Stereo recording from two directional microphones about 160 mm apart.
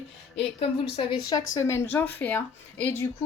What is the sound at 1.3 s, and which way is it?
A woman's voice, 20° left (ahead or behind).